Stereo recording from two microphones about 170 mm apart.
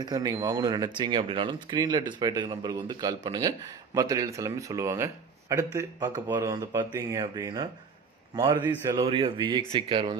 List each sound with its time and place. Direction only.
0.0 s a man's voice: 25° right (ahead or behind)